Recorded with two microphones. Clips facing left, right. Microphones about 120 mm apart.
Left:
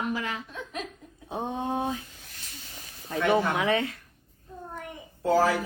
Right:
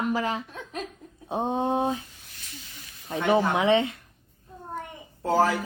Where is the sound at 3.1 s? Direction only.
25° right (ahead or behind).